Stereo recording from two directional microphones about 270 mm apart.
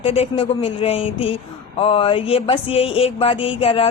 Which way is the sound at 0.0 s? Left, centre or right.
Left.